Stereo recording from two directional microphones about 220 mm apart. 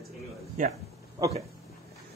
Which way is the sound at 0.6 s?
40° right (ahead or behind).